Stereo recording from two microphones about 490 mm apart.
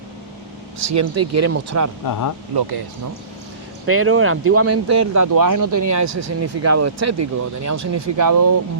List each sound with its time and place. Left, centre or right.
0.9 s speech: right
2.0 s speech: left
2.6 s speech: right
3.8 s speech: right